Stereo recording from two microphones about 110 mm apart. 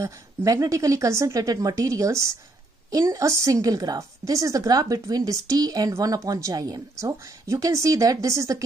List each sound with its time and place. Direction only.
0.0 s a woman's voice: 30° right (ahead or behind)